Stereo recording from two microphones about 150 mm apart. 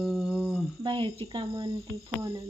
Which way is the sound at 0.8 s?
35° right (ahead or behind).